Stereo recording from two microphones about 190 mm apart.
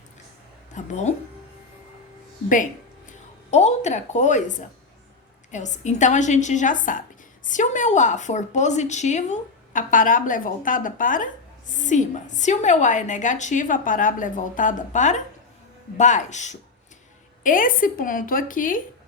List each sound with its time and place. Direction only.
0.7 s a woman's voice: 40° left (ahead or behind)
3.5 s a woman's voice: 35° left (ahead or behind)